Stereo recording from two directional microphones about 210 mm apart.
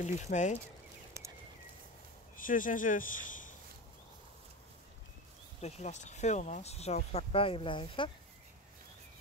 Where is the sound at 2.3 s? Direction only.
40° left (ahead or behind).